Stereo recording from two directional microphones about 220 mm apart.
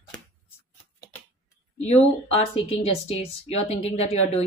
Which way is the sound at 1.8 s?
30° left (ahead or behind).